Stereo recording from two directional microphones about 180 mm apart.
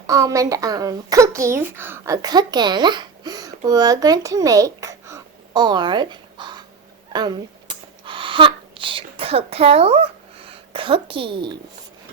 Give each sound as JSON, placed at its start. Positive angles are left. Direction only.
{"t": 0.1, "sound": "speech", "side_deg": -20}
{"t": 7.1, "sound": "a sound", "side_deg": -25}
{"t": 10.7, "sound": "speech", "side_deg": -30}